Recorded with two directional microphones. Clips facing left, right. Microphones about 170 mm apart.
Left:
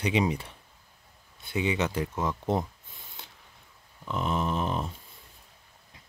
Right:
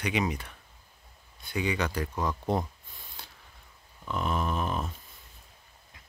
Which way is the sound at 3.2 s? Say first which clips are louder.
Even; 20° left (ahead or behind).